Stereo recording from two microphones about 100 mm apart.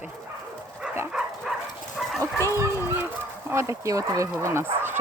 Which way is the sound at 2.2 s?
30° right (ahead or behind).